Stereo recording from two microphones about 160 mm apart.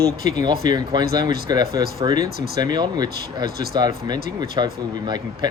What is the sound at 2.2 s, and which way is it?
Speech, 75° right (ahead or behind).